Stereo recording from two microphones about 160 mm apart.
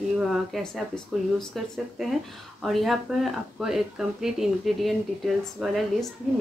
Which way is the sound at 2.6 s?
Centre (ahead or behind).